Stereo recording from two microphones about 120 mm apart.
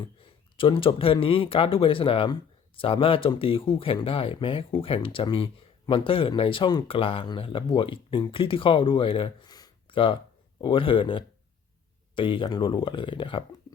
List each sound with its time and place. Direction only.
0.0 s speech: 45° left (ahead or behind)
9.5 s a sound: 40° left (ahead or behind)
10.6 s speech: 45° left (ahead or behind)